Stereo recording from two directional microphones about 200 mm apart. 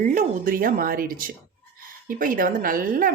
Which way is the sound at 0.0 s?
40° right (ahead or behind).